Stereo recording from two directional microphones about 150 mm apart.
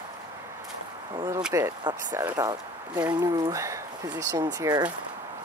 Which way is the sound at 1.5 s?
20° right (ahead or behind).